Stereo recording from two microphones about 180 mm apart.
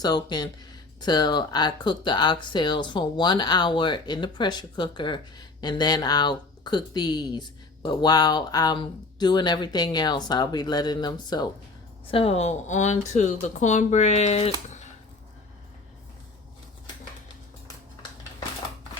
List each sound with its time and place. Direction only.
0.0 s speech: 20° left (ahead or behind)
12.1 s speech: 35° left (ahead or behind)